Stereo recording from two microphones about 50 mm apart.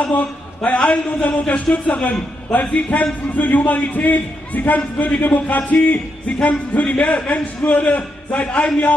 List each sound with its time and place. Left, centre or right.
0.7 s a man's voice: left